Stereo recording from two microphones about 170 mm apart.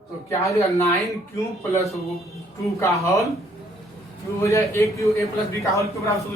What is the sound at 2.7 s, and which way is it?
Speech, 15° left (ahead or behind).